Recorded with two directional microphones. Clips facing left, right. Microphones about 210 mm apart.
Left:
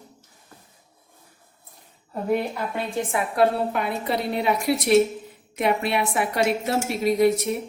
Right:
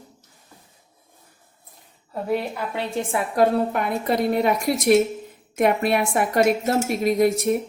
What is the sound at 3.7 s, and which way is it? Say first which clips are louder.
Speech: right 2 dB; 50° right (ahead or behind).